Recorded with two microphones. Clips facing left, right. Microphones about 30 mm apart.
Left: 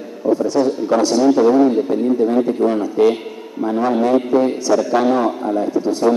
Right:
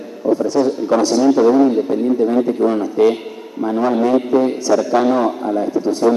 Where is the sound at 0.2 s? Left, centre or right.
Centre.